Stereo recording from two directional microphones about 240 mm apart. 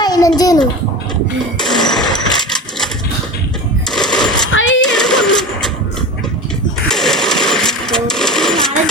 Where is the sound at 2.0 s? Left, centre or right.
Centre.